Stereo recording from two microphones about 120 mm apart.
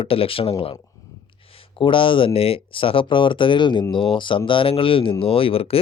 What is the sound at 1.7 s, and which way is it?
Speech, 45° left (ahead or behind).